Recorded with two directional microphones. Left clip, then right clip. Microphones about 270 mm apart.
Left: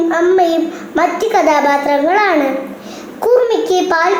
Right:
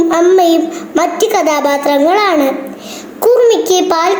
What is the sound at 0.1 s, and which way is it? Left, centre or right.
Child singing, right.